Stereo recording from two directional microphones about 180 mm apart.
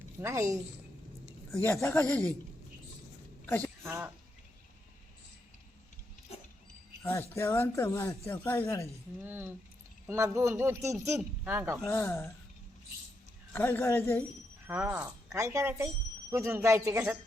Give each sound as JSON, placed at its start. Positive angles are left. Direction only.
{"t": 0.2, "sound": "speech", "side_deg": -15}
{"t": 1.6, "sound": "speech", "side_deg": 10}
{"t": 3.4, "sound": "a sound", "side_deg": 10}
{"t": 3.8, "sound": "speech", "side_deg": -10}
{"t": 7.0, "sound": "speech", "side_deg": 15}
{"t": 9.2, "sound": "speech", "side_deg": -10}
{"t": 11.9, "sound": "speech", "side_deg": 15}
{"t": 13.5, "sound": "speech", "side_deg": 10}
{"t": 14.7, "sound": "speech", "side_deg": -10}